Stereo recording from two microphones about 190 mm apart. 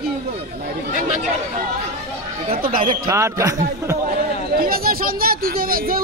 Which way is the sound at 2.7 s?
45° right (ahead or behind).